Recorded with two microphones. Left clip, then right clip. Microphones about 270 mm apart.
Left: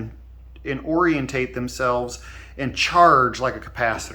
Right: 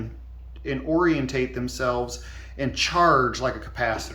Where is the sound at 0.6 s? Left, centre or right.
Centre.